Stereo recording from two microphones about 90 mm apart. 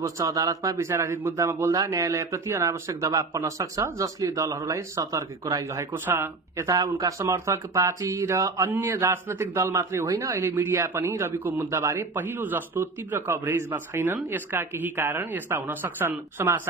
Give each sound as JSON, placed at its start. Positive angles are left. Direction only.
{"t": 0.0, "sound": "speech", "side_deg": -40}
{"t": 6.0, "sound": "a man's voice", "side_deg": -25}
{"t": 6.7, "sound": "speech", "side_deg": -40}
{"t": 8.6, "sound": "a man's voice", "side_deg": -25}
{"t": 9.8, "sound": "a man's voice", "side_deg": -35}
{"t": 11.7, "sound": "a man's voice", "side_deg": -30}